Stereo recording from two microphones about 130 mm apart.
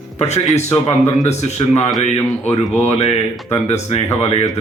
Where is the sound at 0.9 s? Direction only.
55° left (ahead or behind).